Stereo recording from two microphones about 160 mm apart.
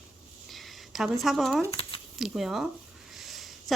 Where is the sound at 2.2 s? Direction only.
Centre (ahead or behind).